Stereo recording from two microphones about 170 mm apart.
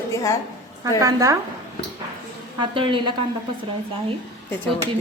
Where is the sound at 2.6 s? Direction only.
30° right (ahead or behind).